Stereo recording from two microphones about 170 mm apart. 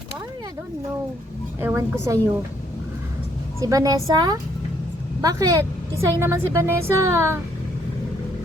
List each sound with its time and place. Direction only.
1.6 s a woman's voice: 15° right (ahead or behind)
3.6 s a woman's voice: 20° right (ahead or behind)